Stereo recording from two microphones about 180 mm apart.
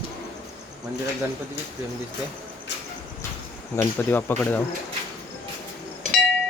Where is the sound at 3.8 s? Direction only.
10° left (ahead or behind).